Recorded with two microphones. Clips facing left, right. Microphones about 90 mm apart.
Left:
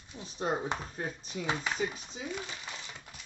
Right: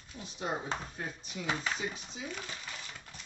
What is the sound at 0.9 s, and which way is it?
Speech, 40° left (ahead or behind).